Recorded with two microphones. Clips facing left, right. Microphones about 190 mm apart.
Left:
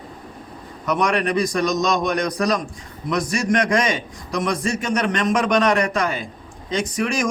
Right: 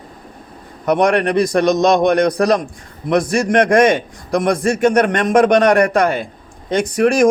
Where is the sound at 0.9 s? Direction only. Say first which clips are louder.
Right 6 dB; 55° right (ahead or behind).